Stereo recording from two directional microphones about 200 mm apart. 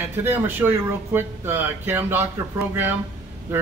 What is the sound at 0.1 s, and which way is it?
A man's voice, 10° right (ahead or behind).